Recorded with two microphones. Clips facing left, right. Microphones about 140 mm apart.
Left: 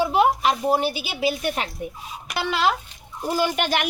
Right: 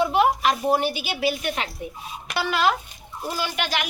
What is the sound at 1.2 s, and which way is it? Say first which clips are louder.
Speech: left 2 dB; 40° left (ahead or behind).